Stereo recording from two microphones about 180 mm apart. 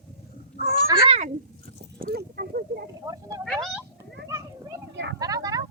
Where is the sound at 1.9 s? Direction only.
55° right (ahead or behind).